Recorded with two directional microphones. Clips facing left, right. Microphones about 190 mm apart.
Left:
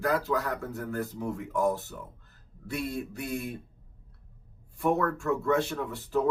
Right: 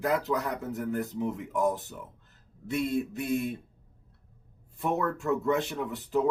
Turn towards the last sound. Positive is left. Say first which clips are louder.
# right 1 dB
turn(degrees=-20)  # may be behind; listen again after turning